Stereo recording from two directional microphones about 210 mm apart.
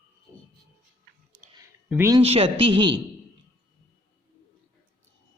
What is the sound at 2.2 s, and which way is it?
Speech, 25° right (ahead or behind).